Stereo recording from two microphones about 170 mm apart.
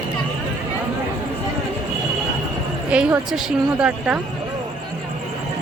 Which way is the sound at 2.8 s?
5° right (ahead or behind).